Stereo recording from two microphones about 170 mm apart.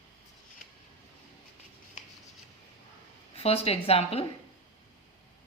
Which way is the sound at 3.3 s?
35° left (ahead or behind).